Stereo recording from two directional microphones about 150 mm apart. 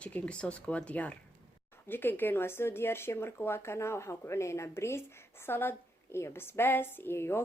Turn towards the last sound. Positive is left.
turn(degrees=15)  # may be behind; listen again after turning